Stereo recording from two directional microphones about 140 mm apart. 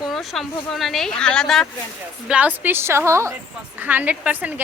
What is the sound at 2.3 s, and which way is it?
Speech, 10° right (ahead or behind).